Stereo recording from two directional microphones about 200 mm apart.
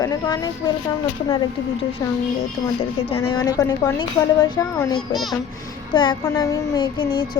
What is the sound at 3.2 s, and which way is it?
A child's voice, 20° left (ahead or behind).